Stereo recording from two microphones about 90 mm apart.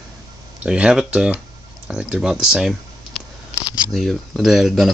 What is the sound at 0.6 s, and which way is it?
Speech, 10° right (ahead or behind).